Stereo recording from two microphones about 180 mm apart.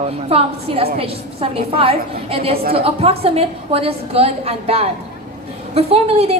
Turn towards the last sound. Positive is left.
turn(degrees=-35)  # may be behind; listen again after turning